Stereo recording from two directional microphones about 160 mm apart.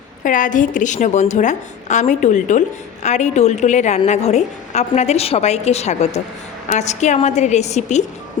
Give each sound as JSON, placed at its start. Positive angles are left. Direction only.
{"t": 0.2, "sound": "a woman's voice", "side_deg": 55}